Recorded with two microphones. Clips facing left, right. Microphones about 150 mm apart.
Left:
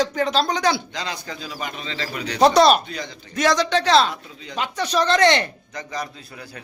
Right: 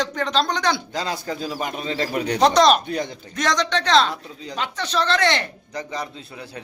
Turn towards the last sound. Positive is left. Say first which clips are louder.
# right 1 dB
turn(degrees=-25)  # may be behind; listen again after turning